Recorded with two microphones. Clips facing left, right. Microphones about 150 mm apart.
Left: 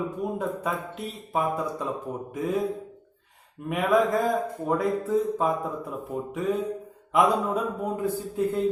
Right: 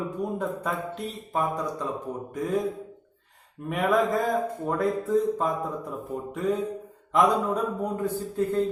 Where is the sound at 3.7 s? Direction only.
Centre (ahead or behind).